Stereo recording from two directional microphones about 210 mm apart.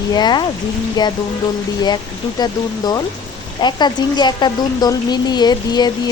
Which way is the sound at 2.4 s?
20° left (ahead or behind).